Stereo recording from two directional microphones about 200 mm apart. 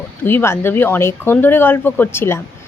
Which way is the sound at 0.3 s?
10° left (ahead or behind).